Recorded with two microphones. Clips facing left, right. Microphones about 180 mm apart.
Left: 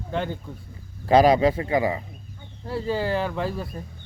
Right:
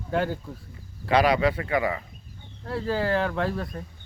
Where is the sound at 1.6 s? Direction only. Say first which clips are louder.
Left 3 dB; 30° left (ahead or behind).